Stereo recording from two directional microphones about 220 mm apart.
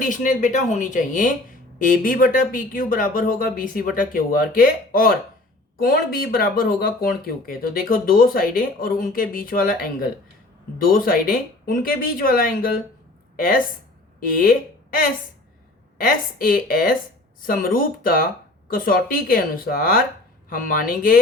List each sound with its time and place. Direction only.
0.0 s speech: 35° left (ahead or behind)
10.8 s a woman's voice: 40° left (ahead or behind)
16.0 s speech: 40° left (ahead or behind)